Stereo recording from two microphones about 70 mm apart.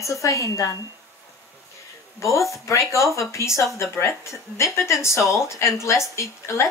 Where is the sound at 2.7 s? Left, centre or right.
Left.